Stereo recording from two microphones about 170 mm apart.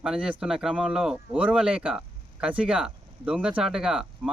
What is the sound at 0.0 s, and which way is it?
Speech, 5° right (ahead or behind).